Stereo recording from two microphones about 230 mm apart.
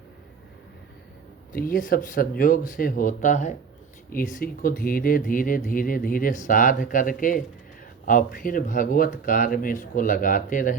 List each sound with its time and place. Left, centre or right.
1.5 s speech: left